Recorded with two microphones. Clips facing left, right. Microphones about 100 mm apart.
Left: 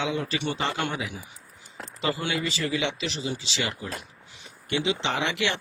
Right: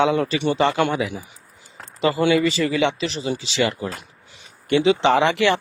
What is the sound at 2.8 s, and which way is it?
Speech, 40° right (ahead or behind).